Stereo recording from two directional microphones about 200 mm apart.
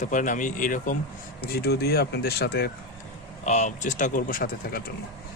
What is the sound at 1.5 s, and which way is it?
Speech, 50° left (ahead or behind).